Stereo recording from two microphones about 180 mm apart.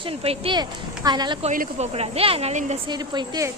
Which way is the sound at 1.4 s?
40° right (ahead or behind).